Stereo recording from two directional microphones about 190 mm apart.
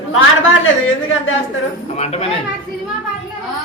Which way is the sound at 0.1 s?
90° left.